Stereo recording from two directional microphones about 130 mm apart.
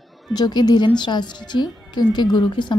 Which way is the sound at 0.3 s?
35° left (ahead or behind).